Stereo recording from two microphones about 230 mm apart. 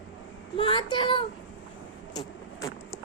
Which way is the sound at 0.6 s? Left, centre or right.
Left.